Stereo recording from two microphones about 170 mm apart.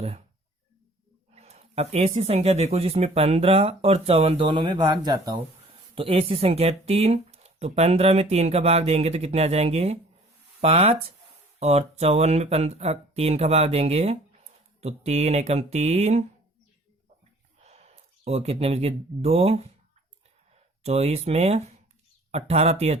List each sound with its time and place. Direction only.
1.3 s speech: 40° right (ahead or behind); by 5.4 s 25° right (ahead or behind)
5.9 s speech: 35° right (ahead or behind)
17.6 s speech: 40° right (ahead or behind)
20.8 s speech: 40° right (ahead or behind)